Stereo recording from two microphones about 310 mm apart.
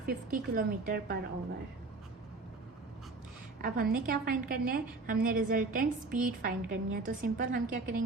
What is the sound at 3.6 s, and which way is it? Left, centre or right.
A woman's voice, right.